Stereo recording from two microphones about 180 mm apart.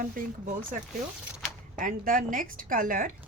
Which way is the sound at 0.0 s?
50° right (ahead or behind).